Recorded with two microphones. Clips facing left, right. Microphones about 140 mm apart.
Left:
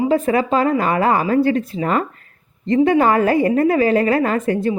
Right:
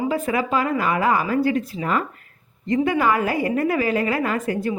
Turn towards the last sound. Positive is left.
turn(degrees=45)  # may be behind; listen again after turning